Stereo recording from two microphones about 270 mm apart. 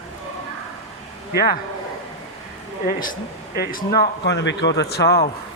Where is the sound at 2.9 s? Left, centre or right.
Left.